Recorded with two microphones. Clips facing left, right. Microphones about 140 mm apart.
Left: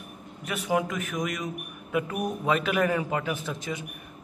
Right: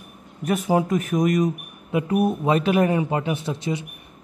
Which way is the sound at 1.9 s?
30° right (ahead or behind).